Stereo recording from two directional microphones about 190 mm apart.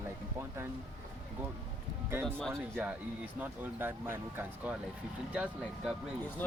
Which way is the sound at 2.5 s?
10° right (ahead or behind).